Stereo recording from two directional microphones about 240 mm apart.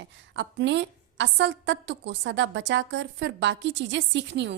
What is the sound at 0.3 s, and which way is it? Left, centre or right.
A woman's voice, right.